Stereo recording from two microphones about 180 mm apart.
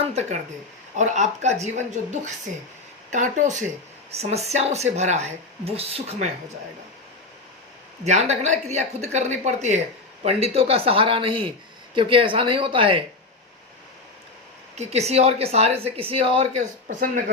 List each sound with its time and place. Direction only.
0.0 s a sound: 35° right (ahead or behind)
0.9 s speech: 40° right (ahead or behind)
8.0 s speech: 40° right (ahead or behind)
14.8 s speech: 35° right (ahead or behind)
16.9 s speech: 50° right (ahead or behind)